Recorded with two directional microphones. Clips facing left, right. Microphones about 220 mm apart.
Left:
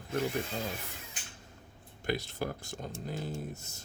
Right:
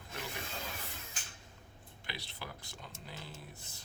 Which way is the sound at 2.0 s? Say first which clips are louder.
Left 14 dB; 45° left (ahead or behind).